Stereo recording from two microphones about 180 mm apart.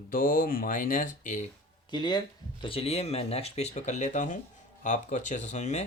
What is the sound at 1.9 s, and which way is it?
Speech, 25° left (ahead or behind).